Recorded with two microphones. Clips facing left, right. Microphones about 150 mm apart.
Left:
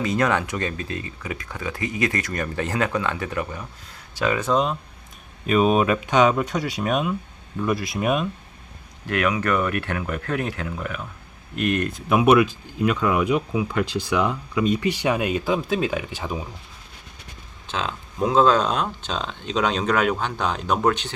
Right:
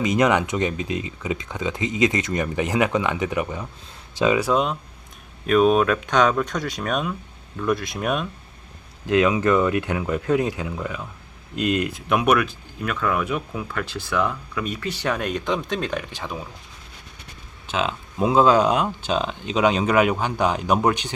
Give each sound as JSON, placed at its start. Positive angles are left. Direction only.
{"t": 0.0, "sound": "speech", "side_deg": -20}
{"t": 9.0, "sound": "speech", "side_deg": -20}
{"t": 11.9, "sound": "speech", "side_deg": 0}
{"t": 12.4, "sound": "speech", "side_deg": 15}
{"t": 17.7, "sound": "speech", "side_deg": -10}